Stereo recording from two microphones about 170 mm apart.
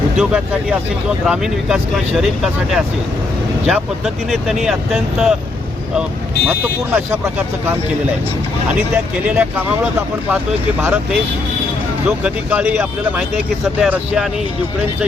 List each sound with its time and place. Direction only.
0.2 s speech: 5° right (ahead or behind)
6.9 s speech: 15° right (ahead or behind)
8.8 s speech: 10° right (ahead or behind)